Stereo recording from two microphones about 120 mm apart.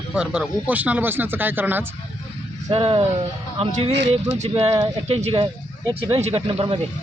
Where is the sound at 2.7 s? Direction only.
55° right (ahead or behind).